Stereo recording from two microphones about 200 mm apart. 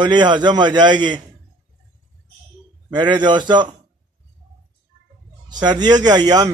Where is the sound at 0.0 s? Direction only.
20° right (ahead or behind).